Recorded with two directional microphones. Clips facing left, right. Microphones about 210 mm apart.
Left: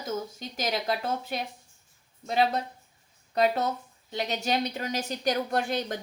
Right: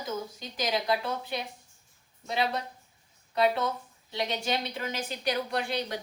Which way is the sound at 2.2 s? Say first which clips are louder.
Left 4 dB; 45° left (ahead or behind).